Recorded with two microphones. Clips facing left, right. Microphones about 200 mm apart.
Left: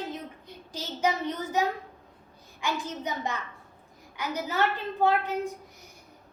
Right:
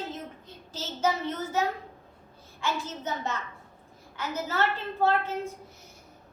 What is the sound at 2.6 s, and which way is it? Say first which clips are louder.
A child's voice: even; 15° left (ahead or behind).